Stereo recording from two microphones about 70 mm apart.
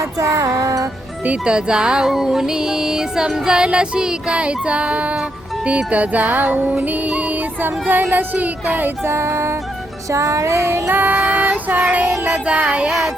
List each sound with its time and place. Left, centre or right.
0.0 s music: right
1.2 s music: centre
9.0 s child singing: right
12.0 s child singing: right
12.3 s music: centre